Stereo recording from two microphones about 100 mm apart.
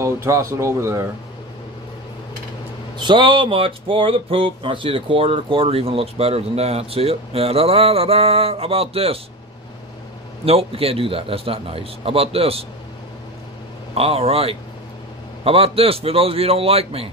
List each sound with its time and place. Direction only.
0.0 s speech: 30° right (ahead or behind)
3.0 s speech: 55° right (ahead or behind); by 9.2 s 75° right (ahead or behind)
10.4 s speech: 75° right (ahead or behind)
13.9 s speech: 80° right